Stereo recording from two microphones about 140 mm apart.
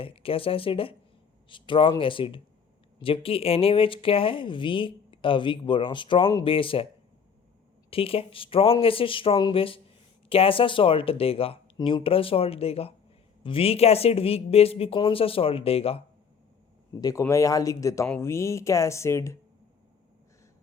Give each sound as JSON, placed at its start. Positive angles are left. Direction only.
{"t": 0.0, "sound": "speech", "side_deg": 40}
{"t": 7.9, "sound": "speech", "side_deg": 40}
{"t": 16.9, "sound": "speech", "side_deg": 25}